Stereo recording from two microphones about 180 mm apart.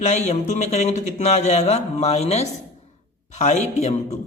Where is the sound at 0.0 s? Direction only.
40° left (ahead or behind).